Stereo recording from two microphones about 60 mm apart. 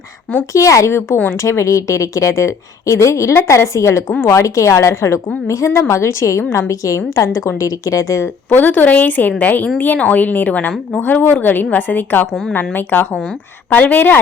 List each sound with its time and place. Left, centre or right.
0.5 s a woman's voice: left
1.4 s a woman's voice: left
8.4 s speech: left
12.3 s a woman's voice: centre
12.7 s a woman's voice: left
13.7 s speech: left